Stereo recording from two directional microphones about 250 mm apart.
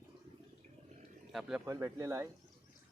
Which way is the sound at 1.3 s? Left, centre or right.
Centre.